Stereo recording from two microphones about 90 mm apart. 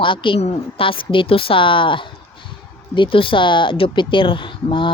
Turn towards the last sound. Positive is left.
turn(degrees=70)  # may be behind; listen again after turning